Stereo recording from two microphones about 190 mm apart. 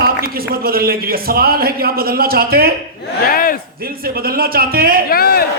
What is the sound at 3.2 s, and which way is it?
Speech, 50° left (ahead or behind).